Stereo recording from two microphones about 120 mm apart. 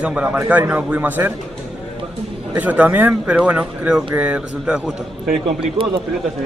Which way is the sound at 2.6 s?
10° right (ahead or behind).